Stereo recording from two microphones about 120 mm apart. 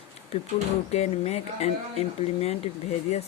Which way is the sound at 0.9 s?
60° left (ahead or behind).